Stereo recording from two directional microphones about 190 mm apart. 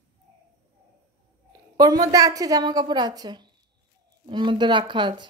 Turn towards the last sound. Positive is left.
turn(degrees=-25)  # may be behind; listen again after turning